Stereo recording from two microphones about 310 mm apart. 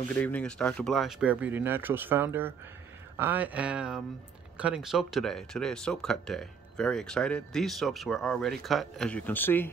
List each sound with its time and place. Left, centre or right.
0.1 s speech: centre